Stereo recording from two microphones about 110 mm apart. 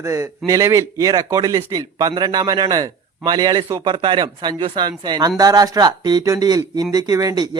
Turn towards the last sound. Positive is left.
turn(degrees=-35)  # may be behind; listen again after turning